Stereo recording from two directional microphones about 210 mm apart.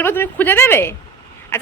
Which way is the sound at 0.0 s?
10° left (ahead or behind).